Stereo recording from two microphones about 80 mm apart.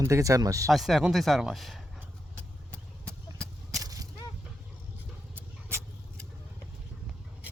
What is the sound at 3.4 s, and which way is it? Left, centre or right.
Vehicle, right.